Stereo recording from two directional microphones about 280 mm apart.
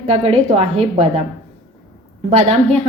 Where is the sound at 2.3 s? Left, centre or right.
Right.